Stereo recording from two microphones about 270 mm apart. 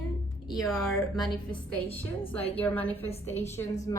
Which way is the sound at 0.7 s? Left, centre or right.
Centre.